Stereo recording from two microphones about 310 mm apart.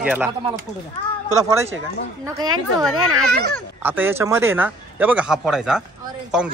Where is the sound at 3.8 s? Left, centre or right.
Centre.